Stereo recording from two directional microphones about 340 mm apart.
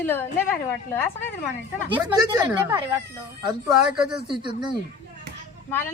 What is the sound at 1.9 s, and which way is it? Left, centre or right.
Speech, centre.